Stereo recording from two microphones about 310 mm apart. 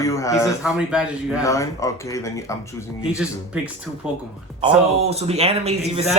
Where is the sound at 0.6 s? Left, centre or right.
Centre.